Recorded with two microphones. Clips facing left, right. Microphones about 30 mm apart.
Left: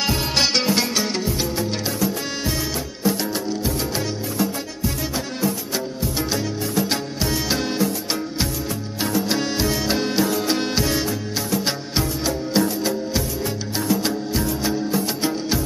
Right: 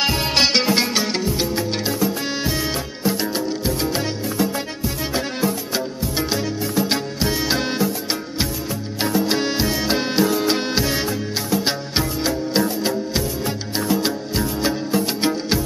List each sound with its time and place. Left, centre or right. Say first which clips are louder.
0.0 s music: right 2 dB; centre
1.6 s music: right 2 dB; centre
2.6 s music: right 1 dB; right
13.7 s music: right 1 dB; centre